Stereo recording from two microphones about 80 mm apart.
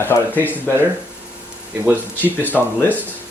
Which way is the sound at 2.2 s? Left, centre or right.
Left.